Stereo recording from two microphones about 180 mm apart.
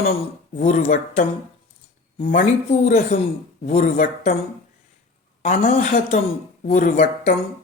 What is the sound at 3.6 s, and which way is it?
Speech, 45° left (ahead or behind).